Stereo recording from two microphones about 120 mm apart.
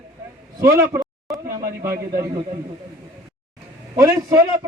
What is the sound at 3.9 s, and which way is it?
Speech, 30° right (ahead or behind).